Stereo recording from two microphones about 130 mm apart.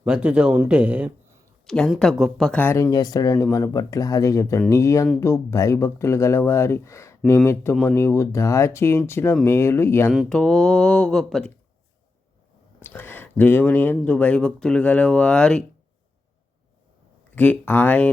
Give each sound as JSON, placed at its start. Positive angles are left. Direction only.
{"t": 0.0, "sound": "speech", "side_deg": -5}
{"t": 1.6, "sound": "speech", "side_deg": 5}
{"t": 2.9, "sound": "speech", "side_deg": 30}
{"t": 10.1, "sound": "speech", "side_deg": 0}
{"t": 12.8, "sound": "speech", "side_deg": 15}
{"t": 17.3, "sound": "speech", "side_deg": 10}